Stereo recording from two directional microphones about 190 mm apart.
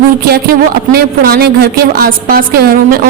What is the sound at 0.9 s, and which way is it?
A woman's voice, 55° right (ahead or behind).